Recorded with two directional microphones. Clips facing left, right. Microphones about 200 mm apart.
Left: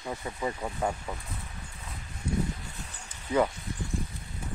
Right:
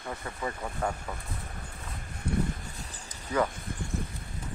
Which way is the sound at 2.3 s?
60° right (ahead or behind).